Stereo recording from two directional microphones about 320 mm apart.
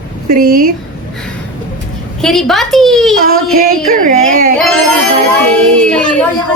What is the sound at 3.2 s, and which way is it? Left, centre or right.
Child singing, right.